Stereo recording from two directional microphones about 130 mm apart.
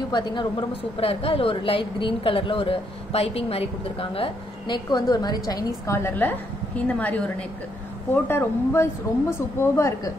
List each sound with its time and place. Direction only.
0.1 s a woman's voice: 35° left (ahead or behind)
6.0 s a woman's voice: 15° left (ahead or behind)